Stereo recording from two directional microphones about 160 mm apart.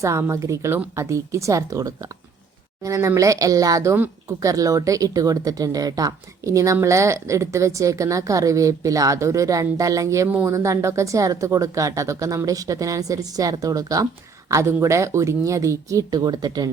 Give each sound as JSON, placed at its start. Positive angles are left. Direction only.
{"t": 0.0, "sound": "speech", "side_deg": -20}